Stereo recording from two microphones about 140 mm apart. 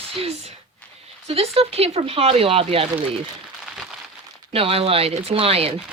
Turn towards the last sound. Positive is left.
turn(degrees=-45)  # may be behind; listen again after turning